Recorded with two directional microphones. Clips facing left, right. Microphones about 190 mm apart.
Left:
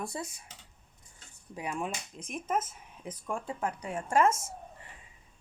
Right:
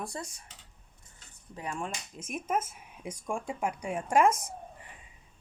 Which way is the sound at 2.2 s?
10° right (ahead or behind).